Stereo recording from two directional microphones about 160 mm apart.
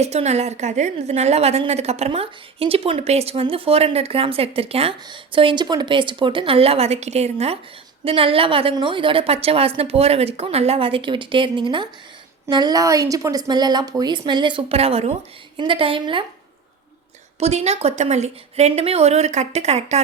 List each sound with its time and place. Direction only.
0.0 s a woman's voice: 45° right (ahead or behind)
17.4 s a woman's voice: 45° right (ahead or behind)